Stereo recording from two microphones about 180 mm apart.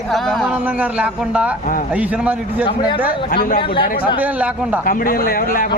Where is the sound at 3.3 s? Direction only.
55° left (ahead or behind).